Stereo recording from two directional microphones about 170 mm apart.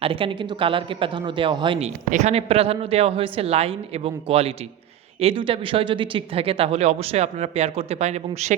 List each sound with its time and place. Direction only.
0.0 s speech: 30° right (ahead or behind)
2.0 s a man's voice: 45° right (ahead or behind)